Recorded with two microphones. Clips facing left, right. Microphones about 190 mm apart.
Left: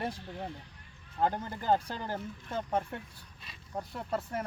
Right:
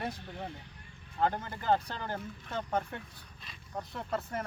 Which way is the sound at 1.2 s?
10° left (ahead or behind).